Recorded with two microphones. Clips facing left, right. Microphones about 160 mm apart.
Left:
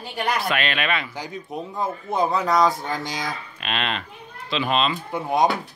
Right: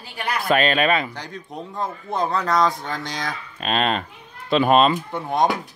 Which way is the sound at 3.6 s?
40° right (ahead or behind).